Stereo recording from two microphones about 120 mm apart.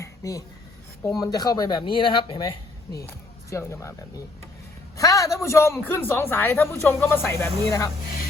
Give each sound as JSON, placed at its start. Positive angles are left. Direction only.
{"t": 0.0, "sound": "writing", "side_deg": 30}
{"t": 1.0, "sound": "speech", "side_deg": 30}
{"t": 3.0, "sound": "speech", "side_deg": 20}